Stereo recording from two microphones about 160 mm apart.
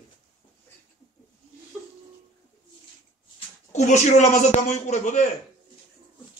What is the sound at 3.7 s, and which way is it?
A man's voice, 45° left (ahead or behind).